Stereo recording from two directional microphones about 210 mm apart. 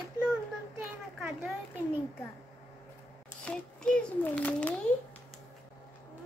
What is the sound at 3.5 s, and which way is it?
A child's voice, 5° left (ahead or behind).